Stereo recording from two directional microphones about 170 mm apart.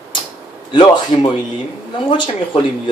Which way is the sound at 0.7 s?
25° left (ahead or behind).